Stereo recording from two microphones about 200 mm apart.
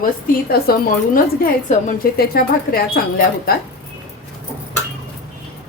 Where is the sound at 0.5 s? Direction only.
45° left (ahead or behind).